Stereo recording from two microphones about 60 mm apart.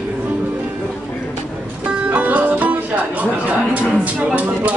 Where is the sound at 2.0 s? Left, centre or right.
Right.